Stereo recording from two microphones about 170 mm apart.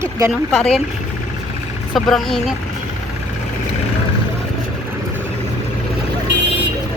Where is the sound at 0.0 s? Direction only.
15° right (ahead or behind).